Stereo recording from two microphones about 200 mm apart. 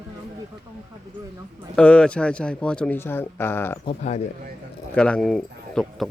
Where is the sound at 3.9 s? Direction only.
35° left (ahead or behind).